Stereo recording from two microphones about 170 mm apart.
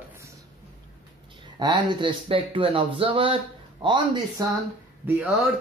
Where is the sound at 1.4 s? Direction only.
25° right (ahead or behind).